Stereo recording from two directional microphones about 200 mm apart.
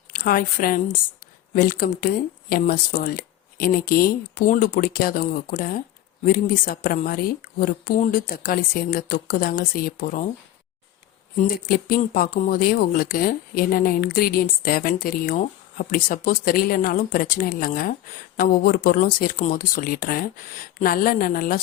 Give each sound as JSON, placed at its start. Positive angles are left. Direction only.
{"t": 0.1, "sound": "speech", "side_deg": 45}
{"t": 11.3, "sound": "speech", "side_deg": 45}